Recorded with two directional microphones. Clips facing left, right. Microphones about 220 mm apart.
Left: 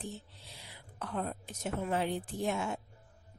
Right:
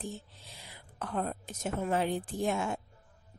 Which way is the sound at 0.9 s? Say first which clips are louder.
Right 2 dB; 50° right (ahead or behind).